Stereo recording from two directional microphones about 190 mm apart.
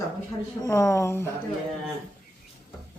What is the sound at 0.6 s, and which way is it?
Speech, 15° left (ahead or behind).